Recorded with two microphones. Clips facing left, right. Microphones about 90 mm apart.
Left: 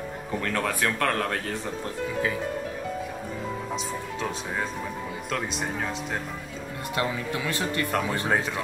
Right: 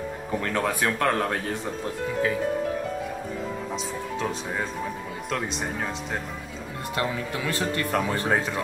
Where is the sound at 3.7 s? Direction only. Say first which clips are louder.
Right 1 dB; centre (ahead or behind).